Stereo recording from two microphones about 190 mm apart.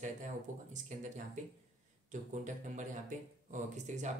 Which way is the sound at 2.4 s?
40° right (ahead or behind).